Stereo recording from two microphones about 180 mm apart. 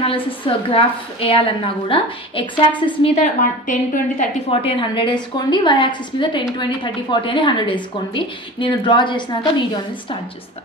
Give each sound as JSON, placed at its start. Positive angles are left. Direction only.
{"t": 0.0, "sound": "a woman's voice", "side_deg": 30}
{"t": 3.0, "sound": "a woman's voice", "side_deg": 40}
{"t": 4.5, "sound": "a woman's voice", "side_deg": 30}